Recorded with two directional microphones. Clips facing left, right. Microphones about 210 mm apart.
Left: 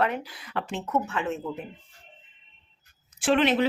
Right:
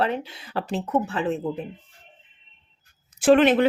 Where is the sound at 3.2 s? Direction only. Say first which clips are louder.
Right 6 dB; 45° right (ahead or behind).